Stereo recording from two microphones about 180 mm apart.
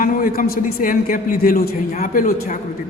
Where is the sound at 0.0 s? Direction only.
50° left (ahead or behind).